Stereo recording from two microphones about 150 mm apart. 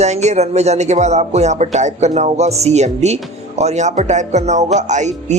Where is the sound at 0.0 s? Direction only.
50° right (ahead or behind).